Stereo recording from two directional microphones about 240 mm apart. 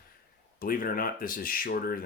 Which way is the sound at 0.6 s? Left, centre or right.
Left.